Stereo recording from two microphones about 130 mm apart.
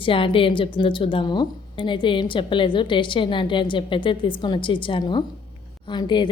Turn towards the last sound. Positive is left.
turn(degrees=35)  # may be behind; listen again after turning